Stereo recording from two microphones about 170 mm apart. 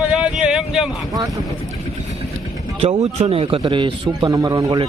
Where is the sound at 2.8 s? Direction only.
40° right (ahead or behind).